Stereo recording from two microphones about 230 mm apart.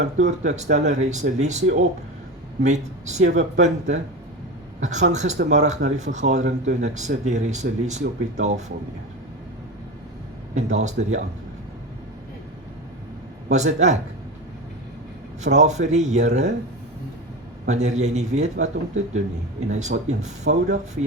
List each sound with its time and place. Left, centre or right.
0.0 s speech: right
10.5 s speech: right
13.5 s speech: right
15.4 s speech: right
17.7 s speech: right